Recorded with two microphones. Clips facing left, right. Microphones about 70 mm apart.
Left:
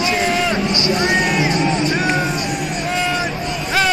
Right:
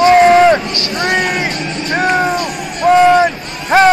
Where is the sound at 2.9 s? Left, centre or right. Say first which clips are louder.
Right 14 dB; right.